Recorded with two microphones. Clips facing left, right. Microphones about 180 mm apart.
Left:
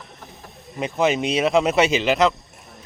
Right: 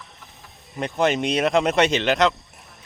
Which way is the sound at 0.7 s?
5° left (ahead or behind).